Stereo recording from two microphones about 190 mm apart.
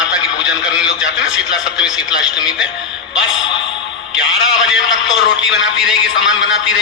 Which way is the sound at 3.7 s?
25° left (ahead or behind).